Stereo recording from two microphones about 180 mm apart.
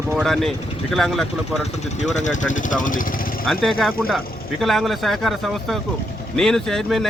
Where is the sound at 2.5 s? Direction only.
45° left (ahead or behind).